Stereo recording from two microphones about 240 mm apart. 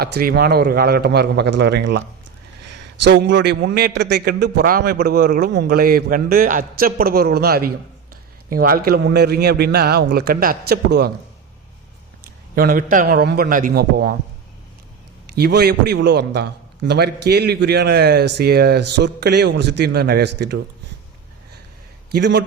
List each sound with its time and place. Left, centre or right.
0.2 s a man's voice: right
12.2 s a man's voice: right
15.4 s a man's voice: right
22.1 s a man's voice: right